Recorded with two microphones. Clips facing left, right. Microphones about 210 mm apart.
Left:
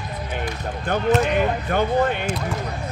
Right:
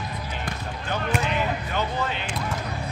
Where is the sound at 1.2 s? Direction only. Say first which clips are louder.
Left 6 dB; 55° left (ahead or behind).